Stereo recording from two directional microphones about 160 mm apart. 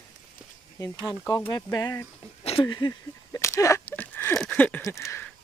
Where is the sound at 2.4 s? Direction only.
35° left (ahead or behind).